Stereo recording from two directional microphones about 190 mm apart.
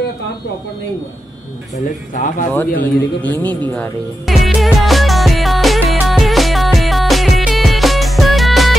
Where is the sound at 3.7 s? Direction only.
5° left (ahead or behind).